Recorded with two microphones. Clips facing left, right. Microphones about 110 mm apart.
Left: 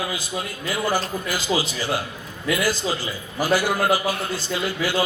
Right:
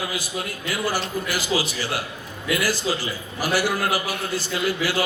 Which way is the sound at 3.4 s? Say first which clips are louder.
Left 3 dB; 20° left (ahead or behind).